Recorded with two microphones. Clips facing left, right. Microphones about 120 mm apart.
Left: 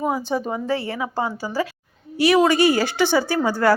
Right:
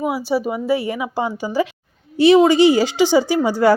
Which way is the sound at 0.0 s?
10° right (ahead or behind).